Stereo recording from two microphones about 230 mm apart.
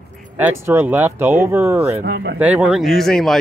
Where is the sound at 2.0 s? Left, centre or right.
Right.